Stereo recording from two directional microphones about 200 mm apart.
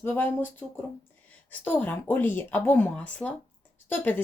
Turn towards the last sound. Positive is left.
turn(degrees=10)  # may be behind; listen again after turning